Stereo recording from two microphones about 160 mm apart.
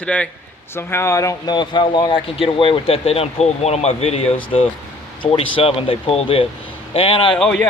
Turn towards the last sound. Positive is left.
turn(degrees=5)  # may be behind; listen again after turning